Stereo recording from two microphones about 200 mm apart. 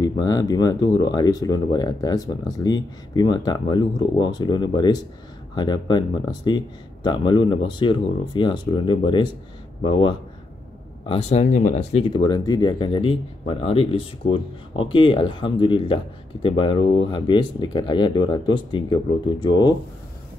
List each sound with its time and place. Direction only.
0.0 s speech: 20° left (ahead or behind)